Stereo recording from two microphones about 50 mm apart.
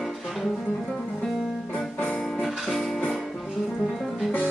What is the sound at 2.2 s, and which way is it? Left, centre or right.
Music, centre.